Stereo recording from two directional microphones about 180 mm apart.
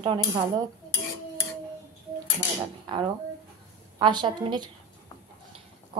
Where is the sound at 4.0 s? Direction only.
25° right (ahead or behind).